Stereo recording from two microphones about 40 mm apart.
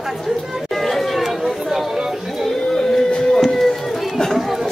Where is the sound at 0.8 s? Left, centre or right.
Centre.